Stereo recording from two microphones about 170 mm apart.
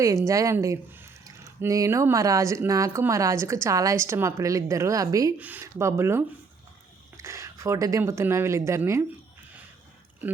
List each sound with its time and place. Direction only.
0.3 s speech: 20° right (ahead or behind)